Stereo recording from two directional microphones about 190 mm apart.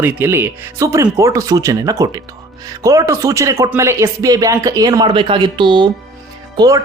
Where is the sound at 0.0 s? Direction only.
10° right (ahead or behind).